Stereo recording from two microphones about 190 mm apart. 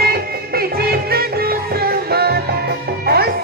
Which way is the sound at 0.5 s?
55° right (ahead or behind).